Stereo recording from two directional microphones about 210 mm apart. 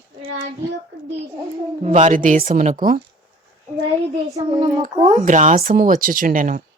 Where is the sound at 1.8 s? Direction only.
35° right (ahead or behind).